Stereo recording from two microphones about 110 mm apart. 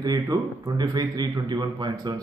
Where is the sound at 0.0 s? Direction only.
35° right (ahead or behind).